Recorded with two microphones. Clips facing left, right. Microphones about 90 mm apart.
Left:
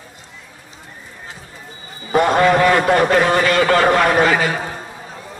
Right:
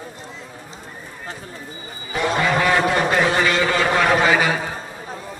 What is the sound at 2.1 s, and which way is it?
A man's voice, 50° left (ahead or behind).